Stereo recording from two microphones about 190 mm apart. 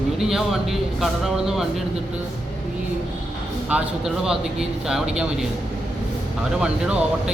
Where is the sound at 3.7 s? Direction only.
5° right (ahead or behind).